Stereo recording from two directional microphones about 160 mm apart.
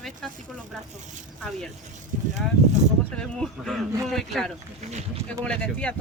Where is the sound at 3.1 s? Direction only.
5° left (ahead or behind).